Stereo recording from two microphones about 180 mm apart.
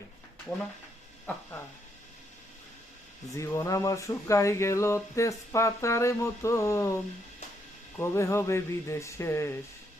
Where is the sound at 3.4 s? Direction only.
15° left (ahead or behind).